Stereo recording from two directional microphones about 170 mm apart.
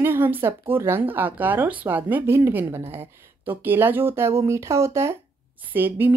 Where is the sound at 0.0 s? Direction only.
10° right (ahead or behind).